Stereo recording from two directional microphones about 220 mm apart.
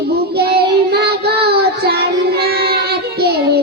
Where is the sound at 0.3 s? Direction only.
45° right (ahead or behind).